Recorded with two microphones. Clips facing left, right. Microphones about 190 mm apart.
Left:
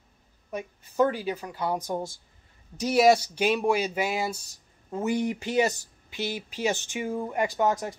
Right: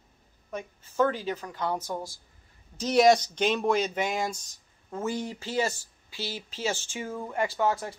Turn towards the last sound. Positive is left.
turn(degrees=15)  # may be behind; listen again after turning